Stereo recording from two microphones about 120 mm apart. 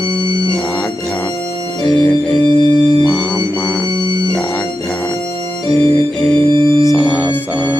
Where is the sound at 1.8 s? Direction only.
10° left (ahead or behind).